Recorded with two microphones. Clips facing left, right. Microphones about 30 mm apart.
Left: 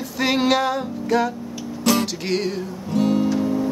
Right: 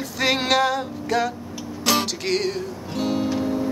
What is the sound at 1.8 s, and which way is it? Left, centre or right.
Music, right.